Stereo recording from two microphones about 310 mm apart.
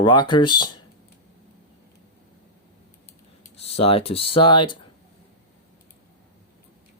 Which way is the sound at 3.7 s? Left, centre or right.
Centre.